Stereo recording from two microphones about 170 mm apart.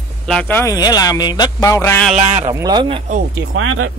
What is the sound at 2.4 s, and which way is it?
Speech, 20° right (ahead or behind).